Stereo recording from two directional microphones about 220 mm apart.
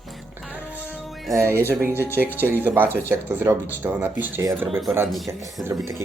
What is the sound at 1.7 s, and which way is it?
Speech, 10° right (ahead or behind).